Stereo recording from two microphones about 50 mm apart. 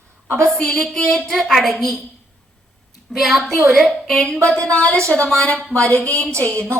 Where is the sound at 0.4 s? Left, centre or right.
Centre.